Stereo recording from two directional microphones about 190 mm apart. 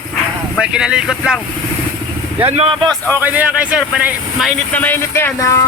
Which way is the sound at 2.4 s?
30° right (ahead or behind).